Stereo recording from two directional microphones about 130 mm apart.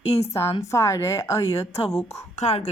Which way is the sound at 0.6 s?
25° left (ahead or behind).